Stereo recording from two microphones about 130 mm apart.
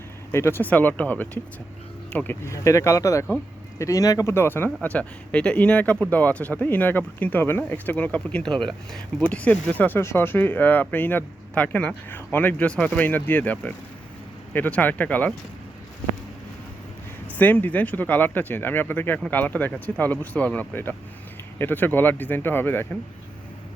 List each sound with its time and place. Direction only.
0.3 s speech: 20° left (ahead or behind)
17.3 s speech: 15° left (ahead or behind)